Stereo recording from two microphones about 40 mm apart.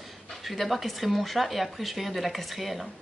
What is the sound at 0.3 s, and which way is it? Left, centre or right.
Speech, centre.